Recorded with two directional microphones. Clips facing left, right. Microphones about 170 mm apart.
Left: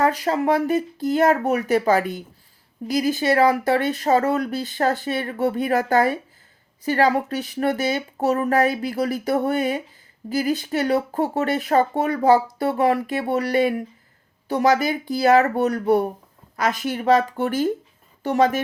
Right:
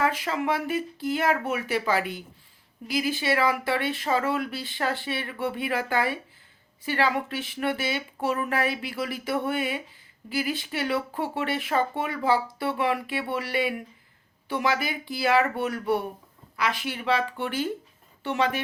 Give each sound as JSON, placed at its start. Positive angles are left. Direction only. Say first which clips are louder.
{"t": 0.0, "sound": "speech", "louder": "left 6 dB", "side_deg": 40}